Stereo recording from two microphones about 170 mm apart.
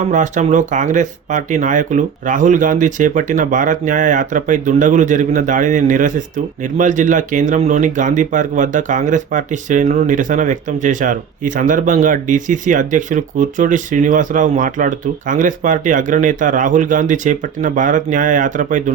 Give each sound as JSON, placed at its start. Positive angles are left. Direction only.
{"t": 0.1, "sound": "speech", "side_deg": -45}